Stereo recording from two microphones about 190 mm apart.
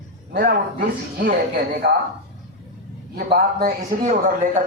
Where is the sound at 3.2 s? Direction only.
50° right (ahead or behind).